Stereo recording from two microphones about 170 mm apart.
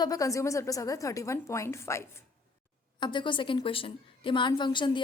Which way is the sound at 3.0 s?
30° left (ahead or behind).